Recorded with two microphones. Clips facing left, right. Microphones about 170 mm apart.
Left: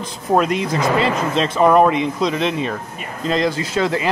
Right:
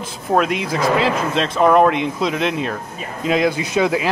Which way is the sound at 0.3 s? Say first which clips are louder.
Left 1 dB; centre (ahead or behind).